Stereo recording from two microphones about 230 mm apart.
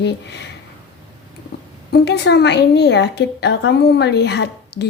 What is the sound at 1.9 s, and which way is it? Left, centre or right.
A woman's voice, left.